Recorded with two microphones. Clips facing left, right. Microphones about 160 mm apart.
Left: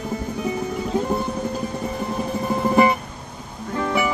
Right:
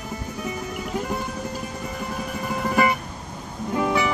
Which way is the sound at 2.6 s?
25° left (ahead or behind).